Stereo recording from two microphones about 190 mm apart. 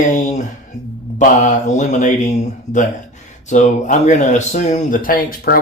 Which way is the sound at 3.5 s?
40° left (ahead or behind).